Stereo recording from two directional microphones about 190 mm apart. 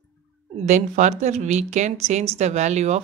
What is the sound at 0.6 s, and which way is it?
Speech, 40° right (ahead or behind).